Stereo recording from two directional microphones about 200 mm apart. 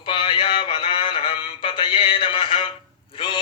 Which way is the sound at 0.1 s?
25° left (ahead or behind).